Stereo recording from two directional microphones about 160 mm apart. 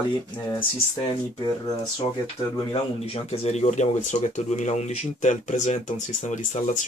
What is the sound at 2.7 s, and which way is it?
Speech, 35° left (ahead or behind).